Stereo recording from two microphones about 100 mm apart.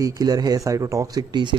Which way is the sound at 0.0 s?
40° right (ahead or behind).